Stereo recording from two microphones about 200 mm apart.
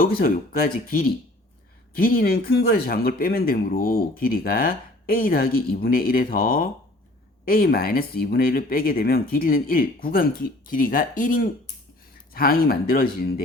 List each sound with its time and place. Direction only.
0.2 s speech: 45° left (ahead or behind)